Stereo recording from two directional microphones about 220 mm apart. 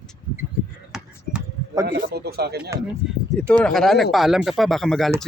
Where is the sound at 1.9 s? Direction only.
45° right (ahead or behind).